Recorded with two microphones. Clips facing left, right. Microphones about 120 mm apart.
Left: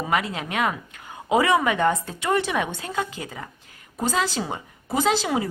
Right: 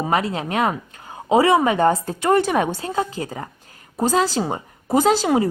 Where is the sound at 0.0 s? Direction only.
35° right (ahead or behind).